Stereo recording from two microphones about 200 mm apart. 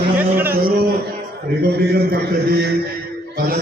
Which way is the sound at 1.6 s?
50° right (ahead or behind).